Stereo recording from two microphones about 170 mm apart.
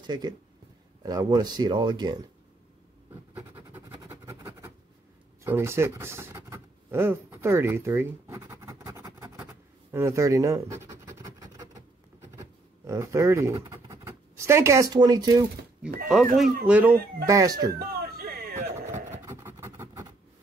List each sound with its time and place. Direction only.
0.0 s speech: 25° right (ahead or behind)
3.5 s vehicle: 15° right (ahead or behind)
5.4 s a sound: 15° right (ahead or behind)
13.7 s speech: 15° right (ahead or behind)
16.1 s speech: centre (ahead or behind)
17.3 s speech: 20° right (ahead or behind)
17.7 s a sound: 65° right (ahead or behind)
18.7 s vehicle: 45° right (ahead or behind)
19.2 s a sound: 15° right (ahead or behind)